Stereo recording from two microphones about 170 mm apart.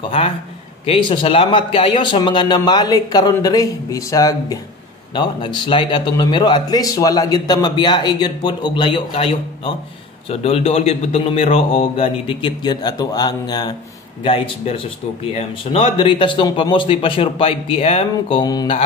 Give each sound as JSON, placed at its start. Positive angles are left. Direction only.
{"t": 0.8, "sound": "speech", "side_deg": 30}
{"t": 10.3, "sound": "a man's voice", "side_deg": 35}
{"t": 18.1, "sound": "speech", "side_deg": 25}